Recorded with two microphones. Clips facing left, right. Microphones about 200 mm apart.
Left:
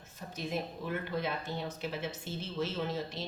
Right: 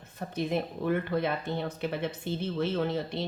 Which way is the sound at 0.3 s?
55° right (ahead or behind).